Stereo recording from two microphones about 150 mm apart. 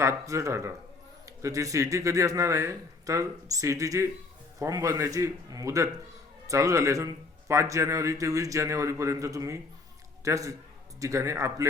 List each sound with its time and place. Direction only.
0.0 s a man's voice: 20° right (ahead or behind)